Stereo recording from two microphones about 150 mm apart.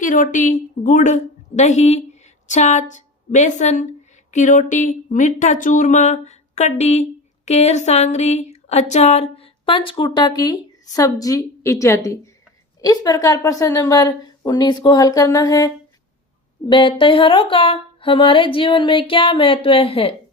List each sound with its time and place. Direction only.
0.0 s a woman's voice: 60° left (ahead or behind); by 20.1 s 40° left (ahead or behind)